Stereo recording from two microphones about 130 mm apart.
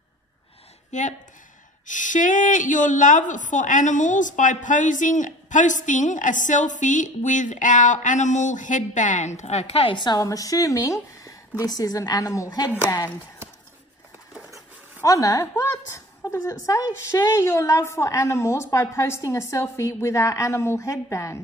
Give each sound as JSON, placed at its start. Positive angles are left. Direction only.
{"t": 0.9, "sound": "a woman's voice", "side_deg": 65}
{"t": 15.0, "sound": "a woman's voice", "side_deg": 25}